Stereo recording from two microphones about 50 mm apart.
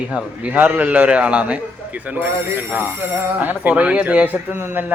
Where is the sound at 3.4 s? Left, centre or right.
Right.